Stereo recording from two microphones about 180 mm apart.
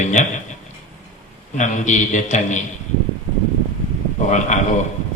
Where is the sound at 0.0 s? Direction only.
40° left (ahead or behind).